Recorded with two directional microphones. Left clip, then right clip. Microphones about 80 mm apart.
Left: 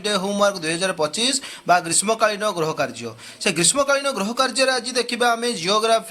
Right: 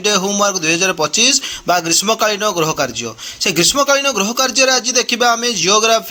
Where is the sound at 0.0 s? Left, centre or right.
Right.